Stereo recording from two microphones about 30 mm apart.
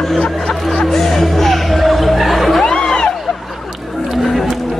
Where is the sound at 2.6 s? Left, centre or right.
Left.